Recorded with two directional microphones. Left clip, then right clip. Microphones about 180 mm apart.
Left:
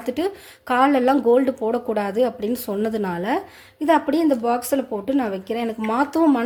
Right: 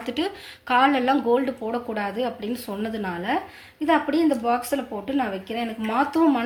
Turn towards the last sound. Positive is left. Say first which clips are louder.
# left 2 dB
turn(degrees=75)  # may be behind; listen again after turning